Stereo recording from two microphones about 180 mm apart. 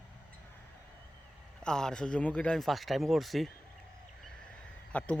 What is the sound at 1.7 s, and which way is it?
Speech, 5° left (ahead or behind).